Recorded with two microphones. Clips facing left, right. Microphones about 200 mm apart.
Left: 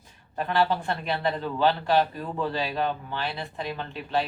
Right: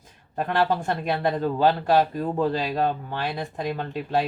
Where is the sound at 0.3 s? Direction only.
45° right (ahead or behind).